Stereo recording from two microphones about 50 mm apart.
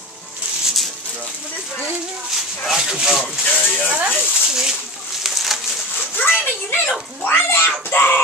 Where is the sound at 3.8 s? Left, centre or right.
Right.